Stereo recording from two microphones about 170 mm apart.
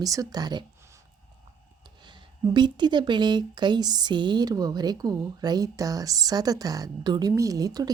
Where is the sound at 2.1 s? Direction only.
25° right (ahead or behind).